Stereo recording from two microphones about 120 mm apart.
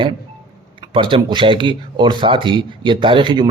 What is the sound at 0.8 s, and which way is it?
Speech, 45° right (ahead or behind).